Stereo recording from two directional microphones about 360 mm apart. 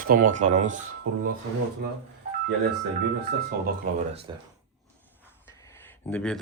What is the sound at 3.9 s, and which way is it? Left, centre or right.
Speech, right.